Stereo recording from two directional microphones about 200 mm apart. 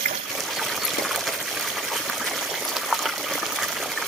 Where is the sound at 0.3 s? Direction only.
Centre (ahead or behind).